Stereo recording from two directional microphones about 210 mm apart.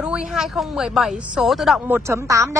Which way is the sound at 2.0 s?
15° right (ahead or behind).